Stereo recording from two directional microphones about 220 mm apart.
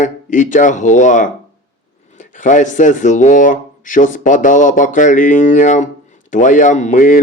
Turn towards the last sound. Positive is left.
turn(degrees=35)  # may be behind; listen again after turning